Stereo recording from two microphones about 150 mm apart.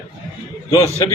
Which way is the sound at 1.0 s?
25° left (ahead or behind).